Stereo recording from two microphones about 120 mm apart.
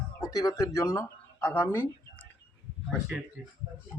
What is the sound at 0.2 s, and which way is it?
Speech, 30° left (ahead or behind).